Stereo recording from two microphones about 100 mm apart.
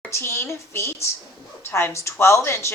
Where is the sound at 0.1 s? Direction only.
25° left (ahead or behind).